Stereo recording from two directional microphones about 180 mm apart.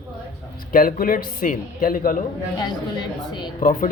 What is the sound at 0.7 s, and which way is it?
A man's voice, 50° left (ahead or behind).